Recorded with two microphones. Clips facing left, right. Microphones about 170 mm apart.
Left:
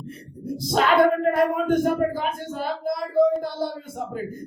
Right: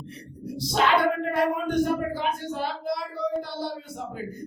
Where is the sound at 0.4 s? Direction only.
50° left (ahead or behind).